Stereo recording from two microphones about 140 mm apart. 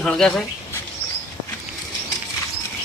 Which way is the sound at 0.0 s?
5° left (ahead or behind).